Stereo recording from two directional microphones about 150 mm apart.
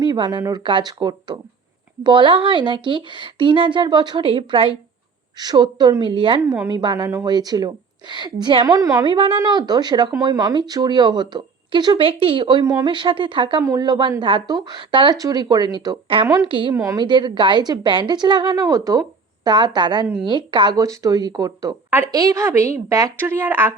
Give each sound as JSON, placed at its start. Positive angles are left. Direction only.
{"t": 0.0, "sound": "speech", "side_deg": -30}
{"t": 6.5, "sound": "speech", "side_deg": -25}
{"t": 13.6, "sound": "speech", "side_deg": -20}
{"t": 16.5, "sound": "speech", "side_deg": -35}
{"t": 16.7, "sound": "speech", "side_deg": -20}
{"t": 17.1, "sound": "speech", "side_deg": -30}